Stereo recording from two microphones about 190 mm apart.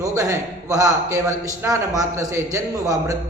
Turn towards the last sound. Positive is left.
turn(degrees=-15)  # may be behind; listen again after turning